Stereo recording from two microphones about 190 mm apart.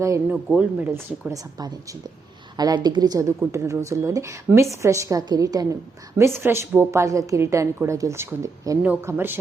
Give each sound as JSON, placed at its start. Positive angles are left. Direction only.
{"t": 0.0, "sound": "a woman's voice", "side_deg": -15}